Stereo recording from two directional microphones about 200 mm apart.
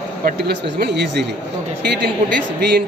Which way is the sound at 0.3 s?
55° right (ahead or behind).